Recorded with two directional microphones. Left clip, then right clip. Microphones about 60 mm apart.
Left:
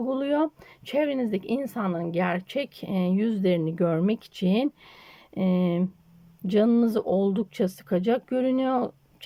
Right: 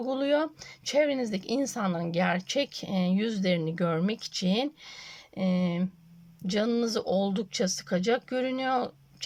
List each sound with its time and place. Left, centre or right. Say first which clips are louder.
0.0 s speech: left 1 dB; left